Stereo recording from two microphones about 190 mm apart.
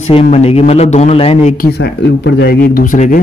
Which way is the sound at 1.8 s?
65° left (ahead or behind).